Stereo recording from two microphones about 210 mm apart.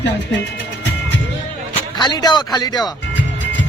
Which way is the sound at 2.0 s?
20° left (ahead or behind).